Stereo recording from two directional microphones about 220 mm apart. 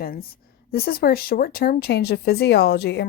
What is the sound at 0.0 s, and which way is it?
A woman's voice, 40° left (ahead or behind).